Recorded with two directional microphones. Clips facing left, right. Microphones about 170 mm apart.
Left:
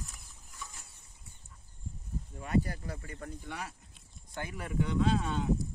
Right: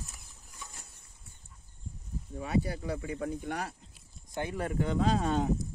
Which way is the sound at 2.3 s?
90° right.